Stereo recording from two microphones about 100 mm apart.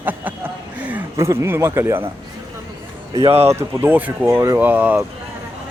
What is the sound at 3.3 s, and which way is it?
Speech, 90° right.